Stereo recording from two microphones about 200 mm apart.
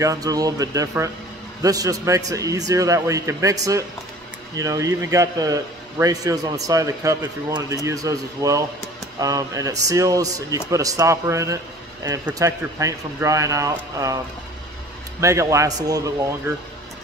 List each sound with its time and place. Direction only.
0.0 s speech: 15° right (ahead or behind)